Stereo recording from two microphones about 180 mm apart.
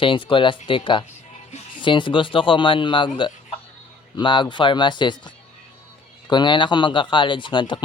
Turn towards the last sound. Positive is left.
turn(degrees=25)  # may be behind; listen again after turning